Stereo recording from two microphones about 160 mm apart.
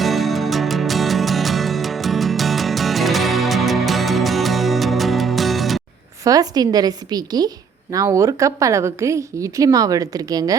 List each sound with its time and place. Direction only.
0.0 s music: centre (ahead or behind)
6.2 s a woman's voice: 25° right (ahead or behind)